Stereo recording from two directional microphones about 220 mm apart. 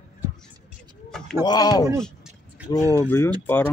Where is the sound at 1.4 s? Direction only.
20° left (ahead or behind).